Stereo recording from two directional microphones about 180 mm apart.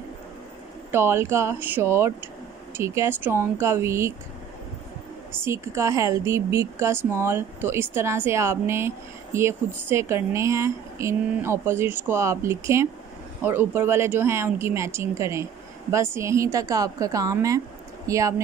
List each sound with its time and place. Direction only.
0.9 s a woman's voice: 15° right (ahead or behind)
5.4 s a woman's voice: 15° right (ahead or behind)